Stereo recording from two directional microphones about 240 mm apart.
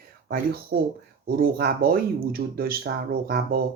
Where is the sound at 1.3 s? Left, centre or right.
Right.